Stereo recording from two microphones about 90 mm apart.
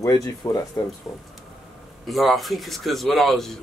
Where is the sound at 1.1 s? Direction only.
35° left (ahead or behind).